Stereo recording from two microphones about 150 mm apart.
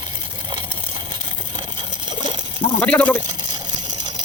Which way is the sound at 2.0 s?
30° right (ahead or behind).